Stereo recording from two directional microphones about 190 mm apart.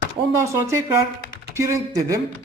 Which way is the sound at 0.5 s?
15° right (ahead or behind).